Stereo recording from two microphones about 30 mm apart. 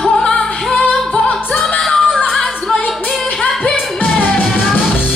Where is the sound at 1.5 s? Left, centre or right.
Centre.